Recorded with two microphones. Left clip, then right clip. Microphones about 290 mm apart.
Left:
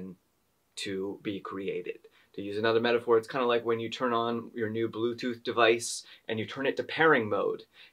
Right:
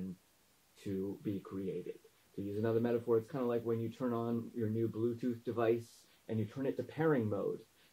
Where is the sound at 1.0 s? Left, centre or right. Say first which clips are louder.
Left 6 dB; centre.